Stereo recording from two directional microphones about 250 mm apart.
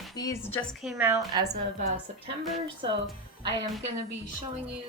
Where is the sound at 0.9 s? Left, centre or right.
Centre.